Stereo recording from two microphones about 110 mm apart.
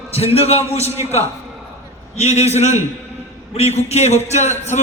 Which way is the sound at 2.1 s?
85° left.